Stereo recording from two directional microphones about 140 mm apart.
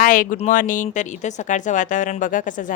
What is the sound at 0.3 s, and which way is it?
Speech, 65° left (ahead or behind).